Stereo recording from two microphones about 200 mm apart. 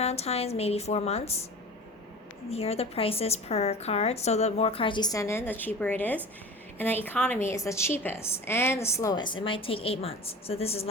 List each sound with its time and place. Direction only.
0.0 s a woman's voice: 30° left (ahead or behind)
2.5 s a woman's voice: 30° left (ahead or behind)